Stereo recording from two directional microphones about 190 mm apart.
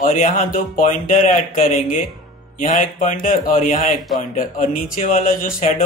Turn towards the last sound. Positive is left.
turn(degrees=45)  # may be behind; listen again after turning